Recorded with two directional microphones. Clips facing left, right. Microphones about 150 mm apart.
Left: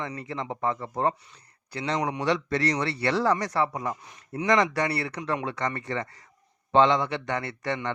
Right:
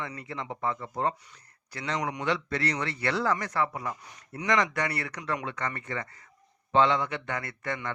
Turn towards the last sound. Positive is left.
turn(degrees=30)  # may be behind; listen again after turning